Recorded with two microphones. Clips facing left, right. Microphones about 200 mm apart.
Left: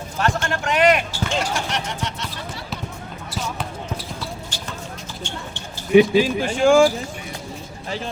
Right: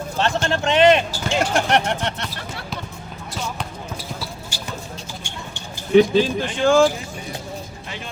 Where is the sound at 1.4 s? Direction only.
55° right (ahead or behind).